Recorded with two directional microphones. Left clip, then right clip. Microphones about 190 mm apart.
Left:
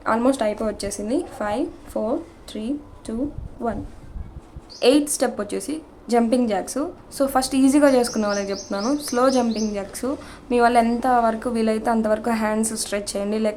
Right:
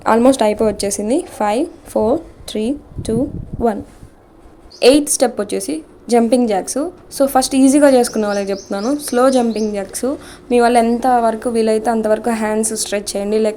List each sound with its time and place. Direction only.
0.0 s speech: 40° right (ahead or behind)
4.8 s a woman's voice: 25° right (ahead or behind)